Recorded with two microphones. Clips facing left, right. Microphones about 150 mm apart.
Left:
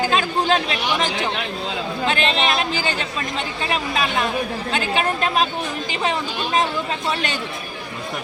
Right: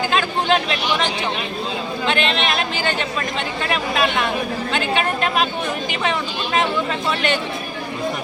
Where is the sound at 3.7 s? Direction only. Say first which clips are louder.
Right 2 dB; 40° left (ahead or behind).